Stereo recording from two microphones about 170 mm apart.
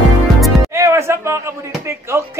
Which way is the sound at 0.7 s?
15° right (ahead or behind).